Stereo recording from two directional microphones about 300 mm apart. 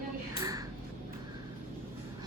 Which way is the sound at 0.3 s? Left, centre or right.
Centre.